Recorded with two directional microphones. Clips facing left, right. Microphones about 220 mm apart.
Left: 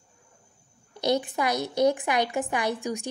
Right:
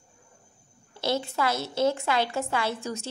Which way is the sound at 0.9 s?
15° left (ahead or behind).